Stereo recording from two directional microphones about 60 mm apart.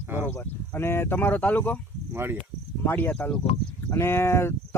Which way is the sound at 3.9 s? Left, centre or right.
Left.